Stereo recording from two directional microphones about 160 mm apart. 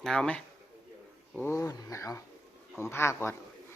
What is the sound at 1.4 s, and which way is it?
A man's voice, 15° left (ahead or behind).